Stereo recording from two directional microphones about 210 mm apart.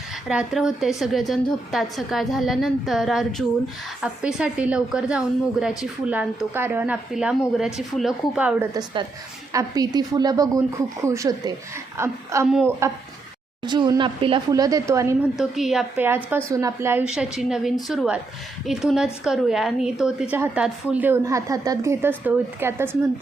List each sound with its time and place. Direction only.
0.3 s a woman's voice: 5° right (ahead or behind)
8.7 s a woman's voice: 20° right (ahead or behind)
12.5 s a woman's voice: centre (ahead or behind)
13.7 s a woman's voice: 20° right (ahead or behind)
15.4 s a woman's voice: centre (ahead or behind)